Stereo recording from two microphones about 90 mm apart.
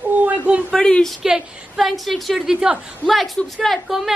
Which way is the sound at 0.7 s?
5° left (ahead or behind).